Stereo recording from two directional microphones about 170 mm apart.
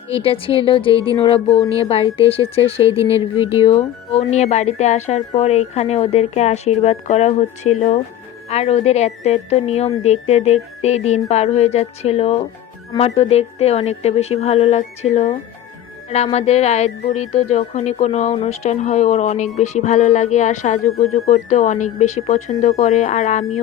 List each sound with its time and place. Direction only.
0.1 s speech: 30° left (ahead or behind)
2.8 s speech: 15° right (ahead or behind)
4.1 s speech: 40° left (ahead or behind)